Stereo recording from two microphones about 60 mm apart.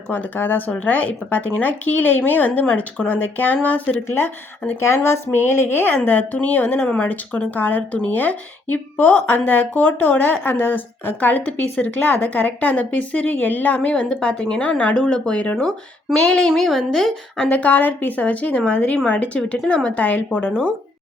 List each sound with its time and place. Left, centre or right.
0.1 s speech: left
4.8 s a woman's voice: left
6.7 s speech: centre
13.9 s a woman's voice: centre
17.3 s speech: centre